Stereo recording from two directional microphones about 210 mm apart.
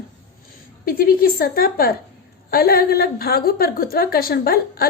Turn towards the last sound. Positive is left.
turn(degrees=45)  # may be behind; listen again after turning